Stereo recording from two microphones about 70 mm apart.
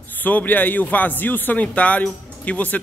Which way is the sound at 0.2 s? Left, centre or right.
Left.